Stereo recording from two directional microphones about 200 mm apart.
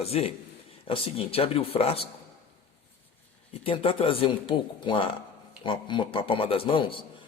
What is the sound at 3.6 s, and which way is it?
Speech, 25° left (ahead or behind).